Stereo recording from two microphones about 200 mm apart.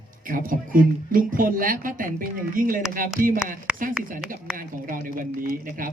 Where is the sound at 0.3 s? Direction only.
45° right (ahead or behind).